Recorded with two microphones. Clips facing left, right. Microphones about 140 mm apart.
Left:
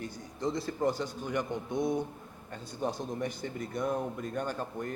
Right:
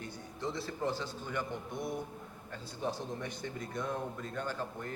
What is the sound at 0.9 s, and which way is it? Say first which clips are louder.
Speech: left 5 dB; 15° left (ahead or behind).